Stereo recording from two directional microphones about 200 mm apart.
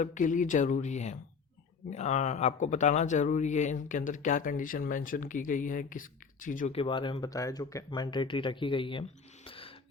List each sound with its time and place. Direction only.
0.0 s speech: 40° left (ahead or behind)
6.7 s speech: 25° left (ahead or behind)